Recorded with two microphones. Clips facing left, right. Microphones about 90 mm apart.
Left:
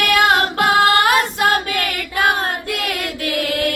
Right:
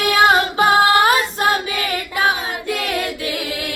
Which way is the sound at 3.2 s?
60° left (ahead or behind).